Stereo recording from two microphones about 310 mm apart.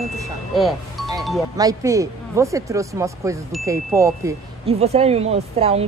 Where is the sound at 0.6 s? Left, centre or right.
Centre.